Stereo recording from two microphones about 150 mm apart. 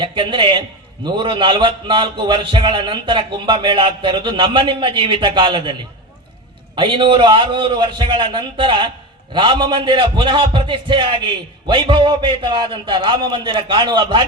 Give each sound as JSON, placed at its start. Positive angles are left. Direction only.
{"t": 0.0, "sound": "a man's voice", "side_deg": -35}
{"t": 6.7, "sound": "a man's voice", "side_deg": -35}